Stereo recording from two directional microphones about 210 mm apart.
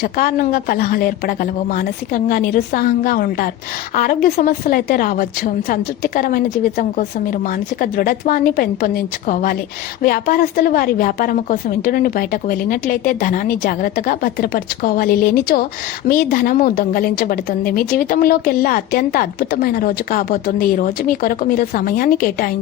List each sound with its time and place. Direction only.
0.0 s a woman's voice: 45° left (ahead or behind)